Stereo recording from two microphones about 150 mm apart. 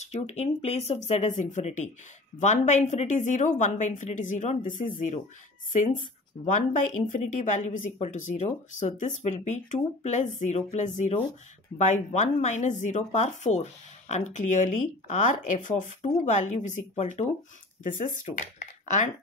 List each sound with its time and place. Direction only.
0.0 s a woman's voice: 45° left (ahead or behind)
6.4 s speech: 55° left (ahead or behind)
17.8 s speech: 60° left (ahead or behind)